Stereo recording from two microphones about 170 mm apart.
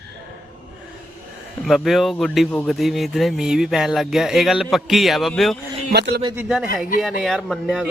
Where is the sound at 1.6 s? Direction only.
Centre (ahead or behind).